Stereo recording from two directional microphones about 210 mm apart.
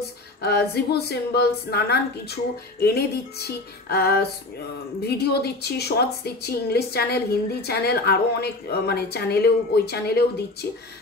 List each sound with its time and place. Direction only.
0.4 s a woman's voice: 50° left (ahead or behind)